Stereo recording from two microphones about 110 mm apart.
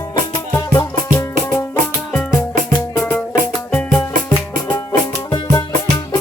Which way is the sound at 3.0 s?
15° left (ahead or behind).